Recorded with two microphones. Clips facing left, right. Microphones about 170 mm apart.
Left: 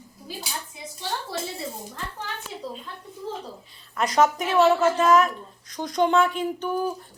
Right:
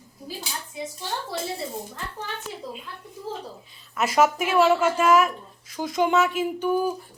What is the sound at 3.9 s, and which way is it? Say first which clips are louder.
A woman's voice: even; 5° right (ahead or behind).